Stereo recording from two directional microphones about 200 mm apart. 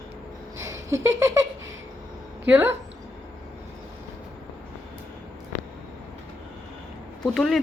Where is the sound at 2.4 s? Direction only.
10° right (ahead or behind).